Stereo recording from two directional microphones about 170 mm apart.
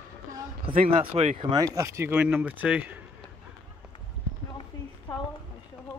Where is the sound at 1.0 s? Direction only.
40° right (ahead or behind).